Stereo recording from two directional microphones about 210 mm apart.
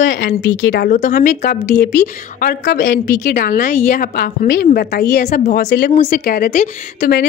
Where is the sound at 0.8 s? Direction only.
35° left (ahead or behind).